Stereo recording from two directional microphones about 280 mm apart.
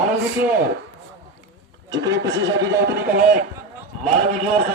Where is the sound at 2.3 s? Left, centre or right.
Right.